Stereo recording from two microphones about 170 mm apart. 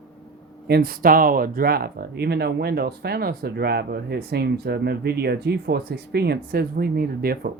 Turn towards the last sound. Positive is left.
turn(degrees=-60)  # may be behind; listen again after turning